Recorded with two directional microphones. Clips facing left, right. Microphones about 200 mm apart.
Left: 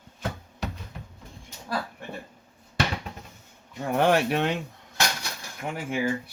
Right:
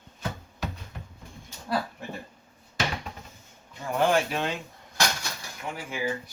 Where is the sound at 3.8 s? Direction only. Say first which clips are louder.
Left 2 dB; 65° left (ahead or behind).